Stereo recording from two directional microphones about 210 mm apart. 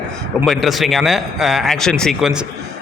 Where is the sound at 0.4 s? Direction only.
Centre (ahead or behind).